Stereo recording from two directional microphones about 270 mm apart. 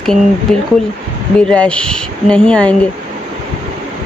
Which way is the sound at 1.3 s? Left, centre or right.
Centre.